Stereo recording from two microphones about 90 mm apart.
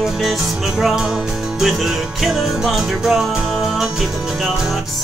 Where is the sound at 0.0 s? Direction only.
5° right (ahead or behind).